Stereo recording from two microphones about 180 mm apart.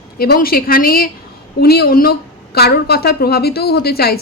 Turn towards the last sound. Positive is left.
turn(degrees=60)  # may be behind; listen again after turning